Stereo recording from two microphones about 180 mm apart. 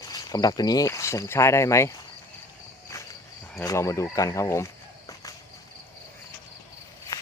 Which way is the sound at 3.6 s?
15° left (ahead or behind).